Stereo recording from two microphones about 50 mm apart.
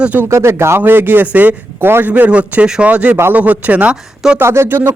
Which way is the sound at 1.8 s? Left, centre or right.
Right.